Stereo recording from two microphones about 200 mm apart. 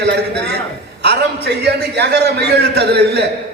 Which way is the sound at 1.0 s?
55° right (ahead or behind).